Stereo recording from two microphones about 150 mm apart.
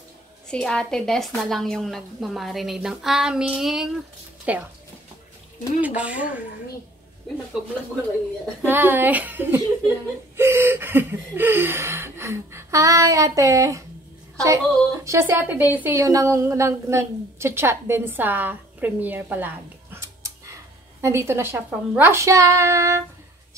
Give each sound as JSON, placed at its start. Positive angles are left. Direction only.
{"t": 0.5, "sound": "a woman's voice", "side_deg": 5}
{"t": 5.8, "sound": "a woman's voice", "side_deg": -10}
{"t": 8.6, "sound": "a woman's voice", "side_deg": -15}